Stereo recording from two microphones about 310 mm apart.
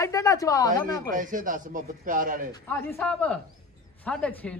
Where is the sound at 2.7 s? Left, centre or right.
Centre.